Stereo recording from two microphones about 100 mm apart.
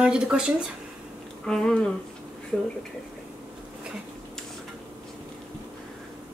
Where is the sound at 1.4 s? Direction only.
5° left (ahead or behind).